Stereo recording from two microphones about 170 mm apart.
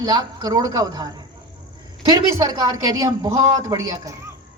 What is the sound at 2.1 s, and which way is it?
A woman's voice, 25° right (ahead or behind).